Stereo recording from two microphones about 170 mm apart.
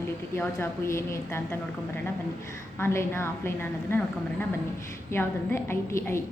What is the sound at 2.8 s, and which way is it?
A woman's voice, 15° left (ahead or behind).